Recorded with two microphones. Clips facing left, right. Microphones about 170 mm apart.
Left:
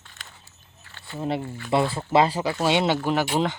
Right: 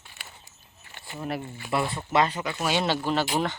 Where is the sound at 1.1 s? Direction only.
25° left (ahead or behind).